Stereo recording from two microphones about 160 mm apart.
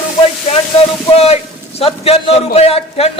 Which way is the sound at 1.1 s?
40° left (ahead or behind).